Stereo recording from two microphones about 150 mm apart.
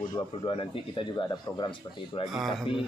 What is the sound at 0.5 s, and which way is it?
Speech, 35° left (ahead or behind).